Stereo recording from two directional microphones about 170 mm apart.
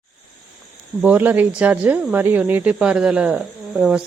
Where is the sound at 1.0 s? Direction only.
10° right (ahead or behind).